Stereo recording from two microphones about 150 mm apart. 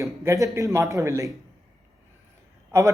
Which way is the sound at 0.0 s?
20° right (ahead or behind).